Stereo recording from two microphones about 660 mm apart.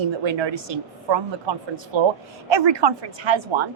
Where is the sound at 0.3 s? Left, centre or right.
Right.